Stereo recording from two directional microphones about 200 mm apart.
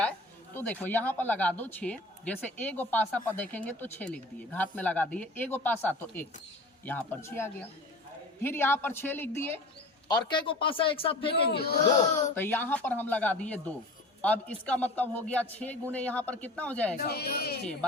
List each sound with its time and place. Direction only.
0.5 s speech: 10° left (ahead or behind)
10.1 s speech: 20° left (ahead or behind)
11.3 s speech: 55° left (ahead or behind)
12.3 s speech: 10° left (ahead or behind)
17.1 s speech: 50° left (ahead or behind)